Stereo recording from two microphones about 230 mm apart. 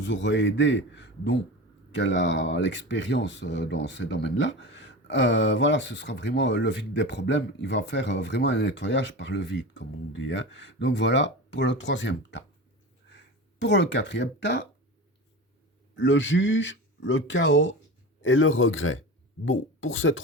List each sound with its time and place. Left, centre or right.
0.0 s speech: left
16.0 s speech: left